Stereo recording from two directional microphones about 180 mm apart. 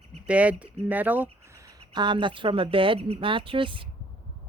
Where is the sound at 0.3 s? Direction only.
5° right (ahead or behind).